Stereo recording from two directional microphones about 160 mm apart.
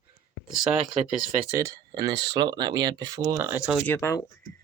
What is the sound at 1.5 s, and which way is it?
Speech, 20° right (ahead or behind).